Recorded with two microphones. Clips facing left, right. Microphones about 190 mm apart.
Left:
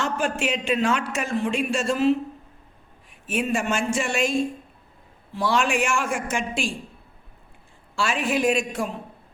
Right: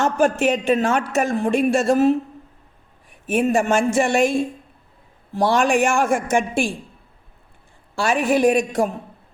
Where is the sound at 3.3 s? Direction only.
50° right (ahead or behind).